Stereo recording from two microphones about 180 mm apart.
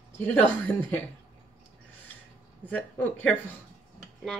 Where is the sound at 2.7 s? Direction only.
5° left (ahead or behind).